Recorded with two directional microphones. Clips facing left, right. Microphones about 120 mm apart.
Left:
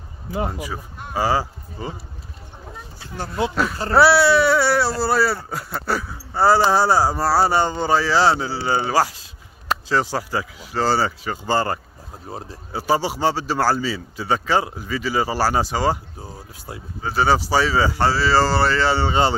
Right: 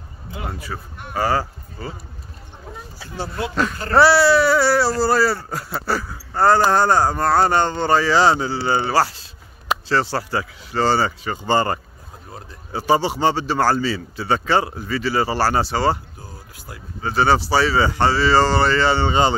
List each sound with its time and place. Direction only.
0.5 s speech: 15° left (ahead or behind)
3.9 s speech: centre (ahead or behind)
12.3 s speech: 30° left (ahead or behind)
12.7 s speech: 5° left (ahead or behind)
16.2 s a sound: 25° left (ahead or behind)
17.0 s speech: 5° left (ahead or behind)